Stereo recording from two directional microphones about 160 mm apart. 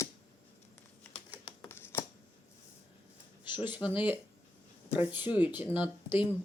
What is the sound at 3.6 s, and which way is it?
Speech, 10° right (ahead or behind).